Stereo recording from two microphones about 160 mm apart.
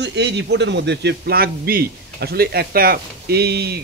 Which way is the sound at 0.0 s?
90° right.